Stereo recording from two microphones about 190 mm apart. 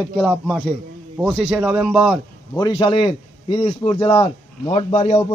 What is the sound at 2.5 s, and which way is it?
A man's voice, 25° left (ahead or behind).